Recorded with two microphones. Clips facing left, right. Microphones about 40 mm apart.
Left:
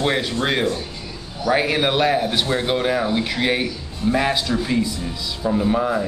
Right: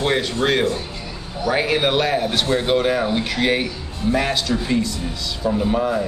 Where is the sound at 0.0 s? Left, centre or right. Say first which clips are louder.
Right 1 dB; centre.